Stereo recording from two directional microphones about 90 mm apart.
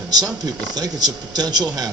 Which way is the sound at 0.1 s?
45° right (ahead or behind).